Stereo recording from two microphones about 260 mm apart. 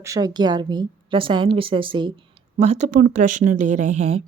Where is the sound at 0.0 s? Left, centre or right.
Centre.